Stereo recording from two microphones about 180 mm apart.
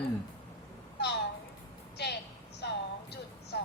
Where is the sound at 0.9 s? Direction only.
65° left (ahead or behind).